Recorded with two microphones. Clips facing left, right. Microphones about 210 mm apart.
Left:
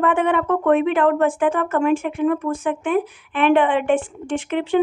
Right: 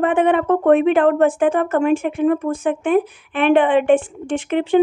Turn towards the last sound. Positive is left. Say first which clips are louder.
# right 3 dB
turn(degrees=-20)  # may be behind; listen again after turning